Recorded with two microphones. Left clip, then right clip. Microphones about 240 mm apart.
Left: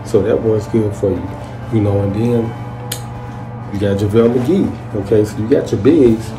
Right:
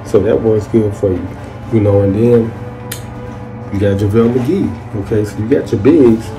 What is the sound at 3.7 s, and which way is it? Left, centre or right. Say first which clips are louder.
Speech: right 1 dB; centre.